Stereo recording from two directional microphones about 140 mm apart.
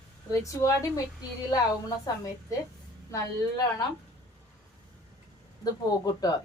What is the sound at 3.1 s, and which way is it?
Speech, 25° left (ahead or behind).